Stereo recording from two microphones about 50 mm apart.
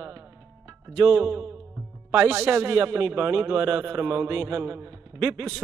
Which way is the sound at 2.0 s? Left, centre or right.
Right.